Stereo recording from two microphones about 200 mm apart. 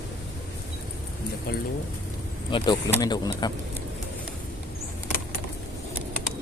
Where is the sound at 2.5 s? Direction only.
25° left (ahead or behind).